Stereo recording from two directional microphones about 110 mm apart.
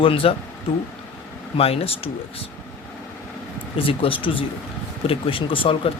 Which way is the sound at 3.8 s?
55° left (ahead or behind).